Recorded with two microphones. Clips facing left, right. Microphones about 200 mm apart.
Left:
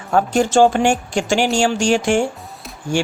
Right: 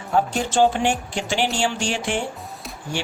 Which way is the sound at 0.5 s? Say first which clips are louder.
Left 4 dB; 45° left (ahead or behind).